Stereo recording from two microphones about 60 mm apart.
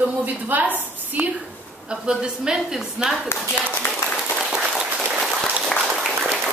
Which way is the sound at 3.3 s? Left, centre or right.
Left.